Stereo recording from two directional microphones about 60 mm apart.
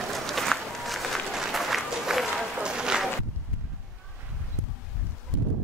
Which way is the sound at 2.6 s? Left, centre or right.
Centre.